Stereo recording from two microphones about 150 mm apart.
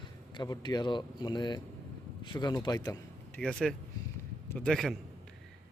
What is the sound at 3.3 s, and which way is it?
A man's voice, 5° left (ahead or behind).